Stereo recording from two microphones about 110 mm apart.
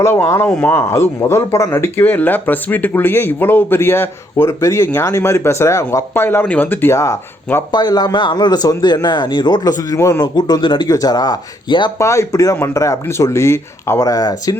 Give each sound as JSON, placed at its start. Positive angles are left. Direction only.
{"t": 0.0, "sound": "speech", "side_deg": 20}
{"t": 7.7, "sound": "a man's voice", "side_deg": 40}
{"t": 10.3, "sound": "speech", "side_deg": 40}
{"t": 10.8, "sound": "a man's voice", "side_deg": 35}
{"t": 11.9, "sound": "speech", "side_deg": 30}